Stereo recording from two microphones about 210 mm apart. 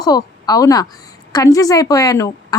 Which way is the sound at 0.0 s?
20° left (ahead or behind).